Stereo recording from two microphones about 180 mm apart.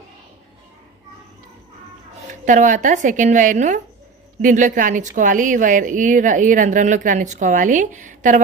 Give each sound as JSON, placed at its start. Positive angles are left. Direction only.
{"t": 2.4, "sound": "a woman's voice", "side_deg": -45}